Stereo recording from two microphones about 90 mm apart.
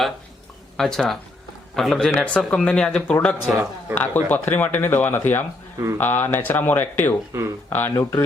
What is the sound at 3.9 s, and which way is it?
Speech, 20° left (ahead or behind).